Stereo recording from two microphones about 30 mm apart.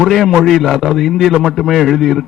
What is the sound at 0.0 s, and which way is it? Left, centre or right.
A man's voice, centre.